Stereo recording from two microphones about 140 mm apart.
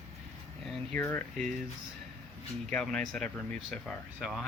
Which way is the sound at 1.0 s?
15° left (ahead or behind).